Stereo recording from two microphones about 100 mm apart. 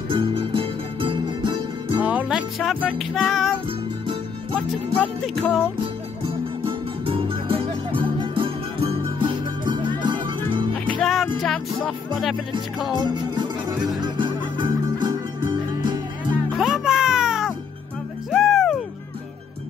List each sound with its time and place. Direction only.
0.1 s music: 60° right (ahead or behind)
2.0 s music: 15° right (ahead or behind)
2.6 s speech: centre (ahead or behind)
4.6 s speech: 5° left (ahead or behind)
6.6 s music: 60° right (ahead or behind)
11.0 s music: centre (ahead or behind)
13.1 s music: 50° right (ahead or behind)
16.5 s music: centre (ahead or behind)